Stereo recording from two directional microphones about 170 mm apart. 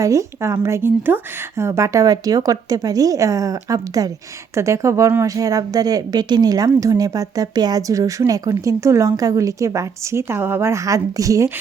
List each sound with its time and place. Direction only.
0.0 s a woman's voice: 20° right (ahead or behind)